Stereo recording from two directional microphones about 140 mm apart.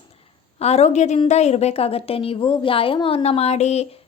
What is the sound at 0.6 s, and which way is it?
A woman's voice, 50° left (ahead or behind).